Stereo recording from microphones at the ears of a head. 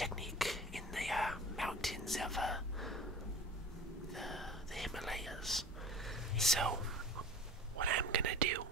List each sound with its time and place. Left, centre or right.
0.0 s whispering: centre
4.1 s whispering: centre
6.6 s whispering: right